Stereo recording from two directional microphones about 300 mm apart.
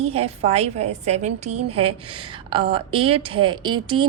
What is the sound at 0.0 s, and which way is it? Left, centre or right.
A woman's voice, centre.